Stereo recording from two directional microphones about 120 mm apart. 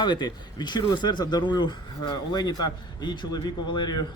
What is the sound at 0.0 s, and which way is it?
A man's voice, 40° left (ahead or behind).